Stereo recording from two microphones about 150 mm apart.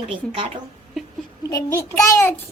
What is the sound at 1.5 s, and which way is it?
Speech, 20° left (ahead or behind).